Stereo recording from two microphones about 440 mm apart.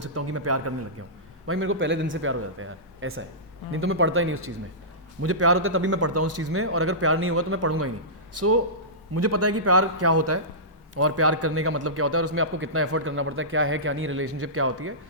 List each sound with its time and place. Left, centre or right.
0.0 s a man's voice: right